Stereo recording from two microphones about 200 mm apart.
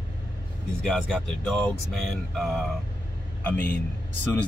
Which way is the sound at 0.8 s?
5° left (ahead or behind).